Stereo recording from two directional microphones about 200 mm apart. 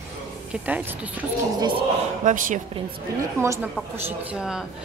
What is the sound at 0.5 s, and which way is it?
Speech, 5° right (ahead or behind).